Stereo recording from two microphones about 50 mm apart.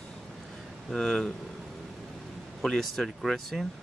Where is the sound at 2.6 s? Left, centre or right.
Centre.